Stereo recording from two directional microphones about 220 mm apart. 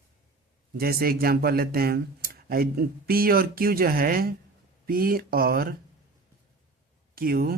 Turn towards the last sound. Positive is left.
turn(degrees=-45)  # may be behind; listen again after turning